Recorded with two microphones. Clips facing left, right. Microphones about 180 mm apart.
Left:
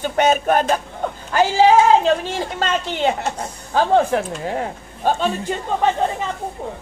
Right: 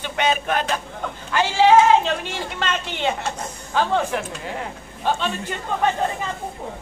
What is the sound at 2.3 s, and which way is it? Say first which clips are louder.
Speech: left 4 dB; 40° left (ahead or behind).